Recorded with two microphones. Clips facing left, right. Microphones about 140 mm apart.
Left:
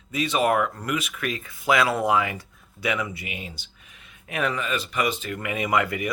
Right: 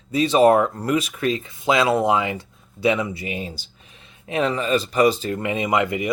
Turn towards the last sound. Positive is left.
turn(degrees=-20)  # may be behind; listen again after turning